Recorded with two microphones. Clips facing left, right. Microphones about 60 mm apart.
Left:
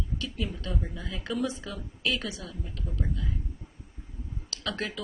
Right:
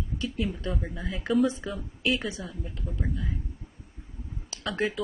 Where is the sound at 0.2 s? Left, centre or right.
Right.